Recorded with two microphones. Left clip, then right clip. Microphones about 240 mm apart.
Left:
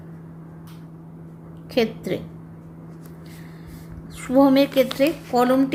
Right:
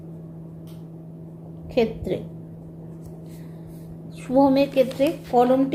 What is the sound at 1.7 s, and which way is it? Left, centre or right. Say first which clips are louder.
Speech: even; left.